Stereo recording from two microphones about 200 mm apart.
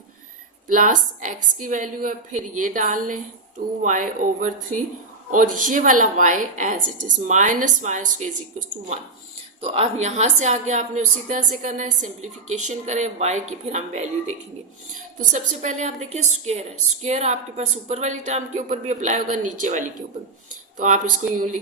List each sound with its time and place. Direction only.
0.7 s a woman's voice: 40° right (ahead or behind)